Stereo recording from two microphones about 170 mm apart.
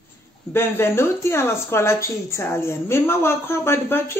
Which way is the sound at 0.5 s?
15° left (ahead or behind).